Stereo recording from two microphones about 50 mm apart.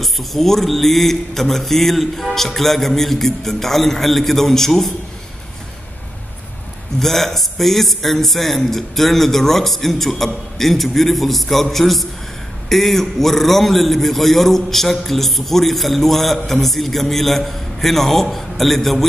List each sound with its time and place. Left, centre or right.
0.0 s a man's voice: centre
7.0 s a man's voice: centre